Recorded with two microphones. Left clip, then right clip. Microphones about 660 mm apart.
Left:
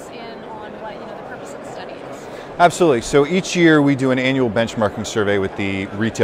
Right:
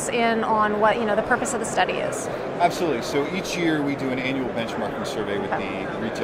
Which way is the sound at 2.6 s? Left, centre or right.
Left.